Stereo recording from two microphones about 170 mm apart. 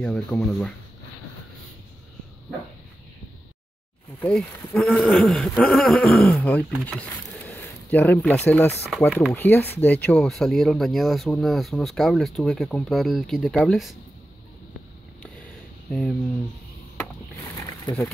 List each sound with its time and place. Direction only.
0.0 s speech: 5° left (ahead or behind)
4.2 s speech: centre (ahead or behind)
15.9 s speech: 5° left (ahead or behind)
17.8 s speech: 15° left (ahead or behind)